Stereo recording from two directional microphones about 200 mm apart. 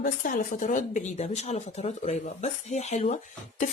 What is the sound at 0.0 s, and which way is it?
Speech, 45° left (ahead or behind).